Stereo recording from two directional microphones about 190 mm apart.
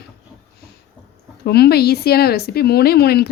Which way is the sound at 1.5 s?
55° left (ahead or behind).